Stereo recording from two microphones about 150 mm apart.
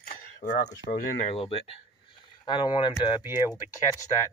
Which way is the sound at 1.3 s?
40° left (ahead or behind).